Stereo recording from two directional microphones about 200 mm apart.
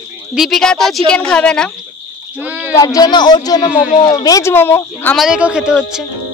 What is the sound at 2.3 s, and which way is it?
Speech, 10° right (ahead or behind).